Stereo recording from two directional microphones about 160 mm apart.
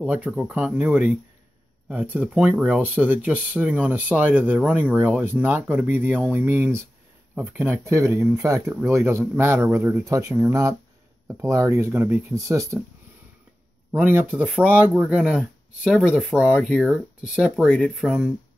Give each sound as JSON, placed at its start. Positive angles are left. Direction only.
{"t": 0.0, "sound": "speech", "side_deg": -10}
{"t": 13.9, "sound": "speech", "side_deg": -10}